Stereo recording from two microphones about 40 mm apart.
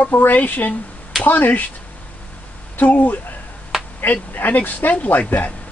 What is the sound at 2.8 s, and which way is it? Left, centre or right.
Speech, left.